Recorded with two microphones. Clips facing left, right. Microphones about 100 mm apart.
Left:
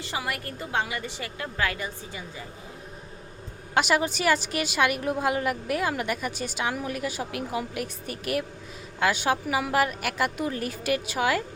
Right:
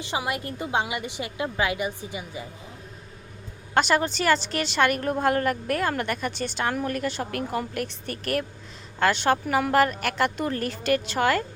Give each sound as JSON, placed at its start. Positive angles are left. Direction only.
{"t": 0.0, "sound": "a woman's voice", "side_deg": -20}
{"t": 3.8, "sound": "a woman's voice", "side_deg": 5}